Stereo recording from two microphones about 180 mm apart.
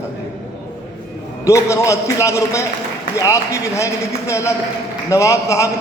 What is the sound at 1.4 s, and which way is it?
A man's voice, 15° left (ahead or behind).